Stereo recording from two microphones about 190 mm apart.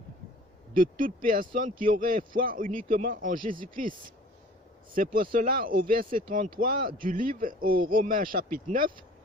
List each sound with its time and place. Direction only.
0.7 s speech: 45° right (ahead or behind)
4.9 s speech: 50° right (ahead or behind)